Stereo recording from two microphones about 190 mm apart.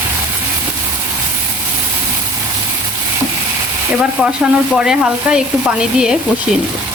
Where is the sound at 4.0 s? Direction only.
5° right (ahead or behind).